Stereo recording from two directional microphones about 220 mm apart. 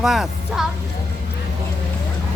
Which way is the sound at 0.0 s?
Centre (ahead or behind).